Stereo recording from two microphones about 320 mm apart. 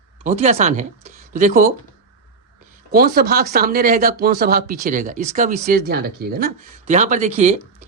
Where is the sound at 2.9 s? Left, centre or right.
Right.